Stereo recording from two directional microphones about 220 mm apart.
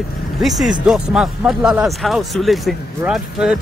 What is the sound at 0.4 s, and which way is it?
Speech, centre (ahead or behind).